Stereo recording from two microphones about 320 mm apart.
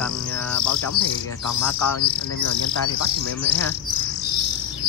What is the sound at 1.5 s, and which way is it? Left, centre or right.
Speech, left.